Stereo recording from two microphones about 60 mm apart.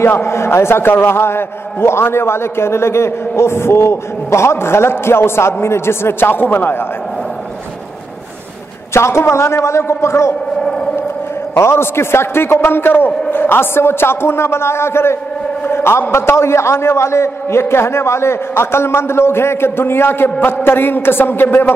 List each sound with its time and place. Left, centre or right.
0.0 s a man's voice: left
8.9 s a man's voice: left
11.5 s a man's voice: left